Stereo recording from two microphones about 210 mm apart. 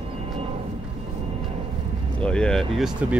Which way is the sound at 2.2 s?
5° left (ahead or behind).